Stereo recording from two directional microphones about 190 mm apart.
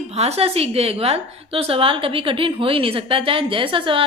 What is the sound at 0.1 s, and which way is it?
A woman's voice, 35° right (ahead or behind).